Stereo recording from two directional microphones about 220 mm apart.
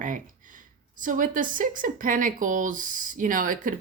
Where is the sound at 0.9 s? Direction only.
35° right (ahead or behind).